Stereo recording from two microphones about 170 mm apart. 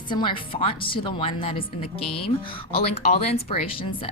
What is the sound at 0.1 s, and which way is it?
Speech, 30° left (ahead or behind).